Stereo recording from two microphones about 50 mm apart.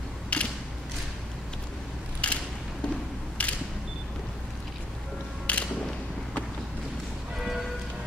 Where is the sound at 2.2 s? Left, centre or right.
Left.